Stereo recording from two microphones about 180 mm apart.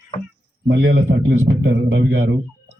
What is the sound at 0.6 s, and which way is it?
A man's voice, 80° right.